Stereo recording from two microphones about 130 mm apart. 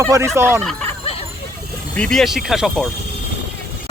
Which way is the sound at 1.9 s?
5° left (ahead or behind).